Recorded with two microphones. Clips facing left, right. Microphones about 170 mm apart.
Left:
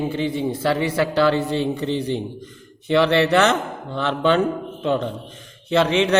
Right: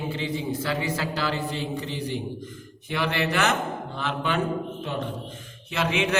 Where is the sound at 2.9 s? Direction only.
75° left (ahead or behind).